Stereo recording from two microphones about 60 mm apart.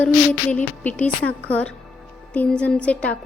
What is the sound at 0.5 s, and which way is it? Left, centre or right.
Speech, left.